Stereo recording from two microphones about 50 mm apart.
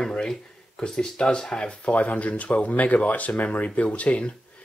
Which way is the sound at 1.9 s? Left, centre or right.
Left.